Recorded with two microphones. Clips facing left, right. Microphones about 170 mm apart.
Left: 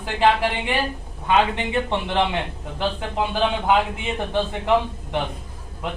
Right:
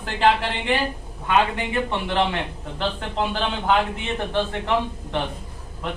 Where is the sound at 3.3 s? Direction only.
15° left (ahead or behind).